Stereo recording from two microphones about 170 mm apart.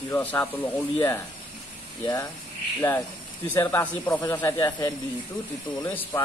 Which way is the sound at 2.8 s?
10° left (ahead or behind).